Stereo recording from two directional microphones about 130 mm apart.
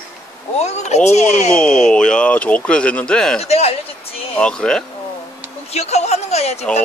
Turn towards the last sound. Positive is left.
turn(degrees=55)  # may be behind; listen again after turning